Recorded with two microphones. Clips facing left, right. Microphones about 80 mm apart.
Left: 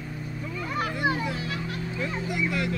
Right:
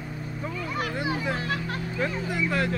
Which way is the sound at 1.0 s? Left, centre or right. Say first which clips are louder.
Left 2 dB; left.